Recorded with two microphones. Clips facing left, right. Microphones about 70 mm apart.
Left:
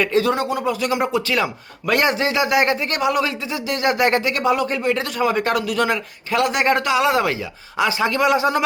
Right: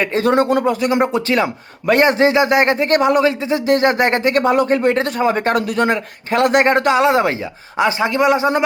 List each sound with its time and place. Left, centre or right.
0.0 s speech: right
0.8 s speech: right